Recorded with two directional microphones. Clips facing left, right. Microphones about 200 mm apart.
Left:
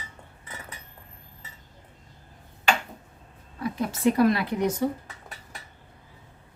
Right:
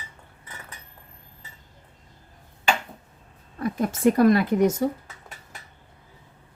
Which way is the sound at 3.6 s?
50° right (ahead or behind).